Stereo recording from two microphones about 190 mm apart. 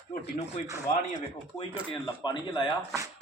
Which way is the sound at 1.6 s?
25° left (ahead or behind).